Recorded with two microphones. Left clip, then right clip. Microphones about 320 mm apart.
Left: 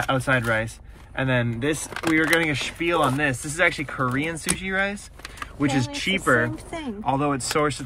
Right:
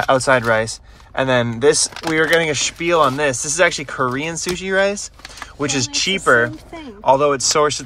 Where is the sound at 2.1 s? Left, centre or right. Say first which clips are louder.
Right 5 dB; centre.